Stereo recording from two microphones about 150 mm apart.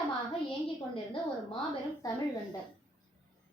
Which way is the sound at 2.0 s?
25° left (ahead or behind).